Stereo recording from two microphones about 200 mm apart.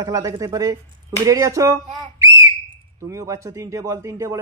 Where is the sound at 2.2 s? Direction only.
15° right (ahead or behind).